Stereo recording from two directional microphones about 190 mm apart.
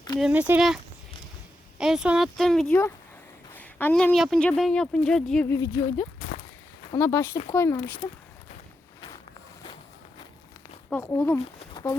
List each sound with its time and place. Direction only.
0.2 s speech: 10° right (ahead or behind)
1.8 s a woman's voice: 5° right (ahead or behind)
5.5 s speech: 15° left (ahead or behind)
11.0 s speech: 15° left (ahead or behind)
11.6 s a sound: 20° left (ahead or behind)